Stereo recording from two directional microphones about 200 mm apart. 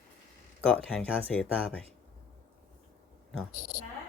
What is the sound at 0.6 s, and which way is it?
Speech, 5° left (ahead or behind).